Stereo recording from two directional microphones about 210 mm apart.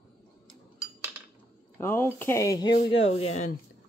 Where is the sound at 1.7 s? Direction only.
10° left (ahead or behind).